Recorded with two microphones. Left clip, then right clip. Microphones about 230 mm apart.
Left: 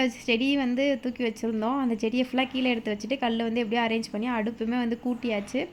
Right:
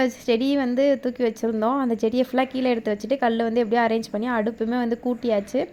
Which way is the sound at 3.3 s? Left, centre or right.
Right.